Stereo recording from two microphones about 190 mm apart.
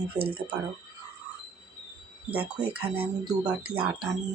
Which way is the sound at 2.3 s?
10° right (ahead or behind).